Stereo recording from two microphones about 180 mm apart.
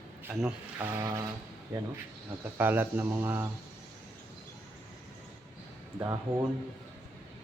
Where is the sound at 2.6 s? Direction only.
10° right (ahead or behind).